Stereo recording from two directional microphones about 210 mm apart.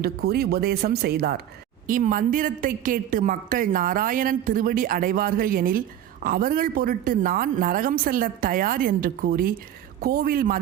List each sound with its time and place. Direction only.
0.0 s a woman's voice: 50° right (ahead or behind)